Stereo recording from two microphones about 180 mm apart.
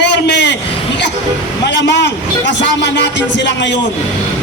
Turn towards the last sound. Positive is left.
turn(degrees=80)